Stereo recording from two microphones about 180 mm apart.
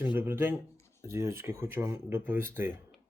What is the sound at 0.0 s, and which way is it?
Speech, 10° right (ahead or behind).